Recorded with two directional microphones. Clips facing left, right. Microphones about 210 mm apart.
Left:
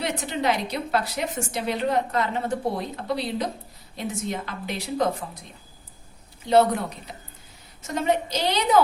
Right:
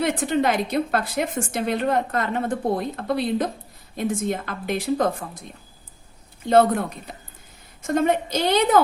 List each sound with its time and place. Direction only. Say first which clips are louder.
0.0 s a woman's voice: right 5 dB; 50° right (ahead or behind)